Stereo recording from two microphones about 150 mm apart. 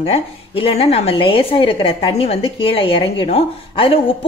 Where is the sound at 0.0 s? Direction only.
40° left (ahead or behind).